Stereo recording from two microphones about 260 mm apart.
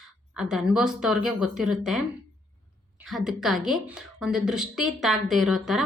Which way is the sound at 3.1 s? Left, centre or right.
Centre.